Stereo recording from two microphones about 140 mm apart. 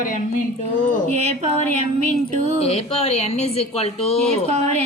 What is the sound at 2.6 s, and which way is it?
Speech, 45° left (ahead or behind).